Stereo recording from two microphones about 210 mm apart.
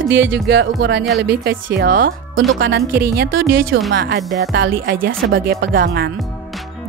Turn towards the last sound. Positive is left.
turn(degrees=-45)  # may be behind; listen again after turning